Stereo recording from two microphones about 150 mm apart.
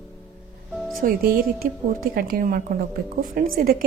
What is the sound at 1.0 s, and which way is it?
A woman's voice, 75° right (ahead or behind).